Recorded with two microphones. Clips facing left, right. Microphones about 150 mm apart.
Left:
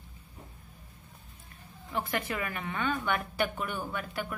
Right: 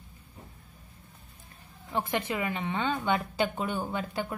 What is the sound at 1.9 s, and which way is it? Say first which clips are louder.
A woman's voice: right 3 dB; 25° right (ahead or behind).